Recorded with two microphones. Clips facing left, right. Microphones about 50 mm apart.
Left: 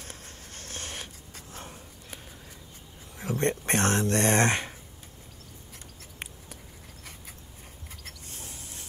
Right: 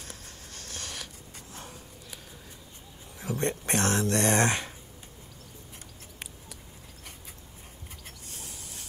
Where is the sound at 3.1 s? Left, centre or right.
Left.